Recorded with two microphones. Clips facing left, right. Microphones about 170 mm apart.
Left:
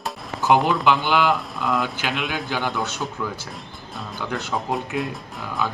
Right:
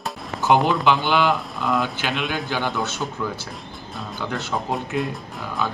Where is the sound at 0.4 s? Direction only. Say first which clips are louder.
Even; centre (ahead or behind).